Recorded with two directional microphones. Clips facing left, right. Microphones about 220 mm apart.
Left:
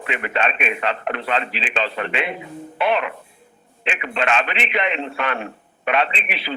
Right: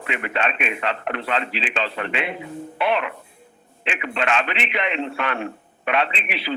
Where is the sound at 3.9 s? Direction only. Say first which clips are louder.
Left 1 dB; 25° left (ahead or behind).